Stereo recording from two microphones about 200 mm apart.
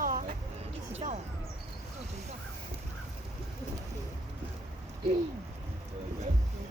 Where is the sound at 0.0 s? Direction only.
40° right (ahead or behind).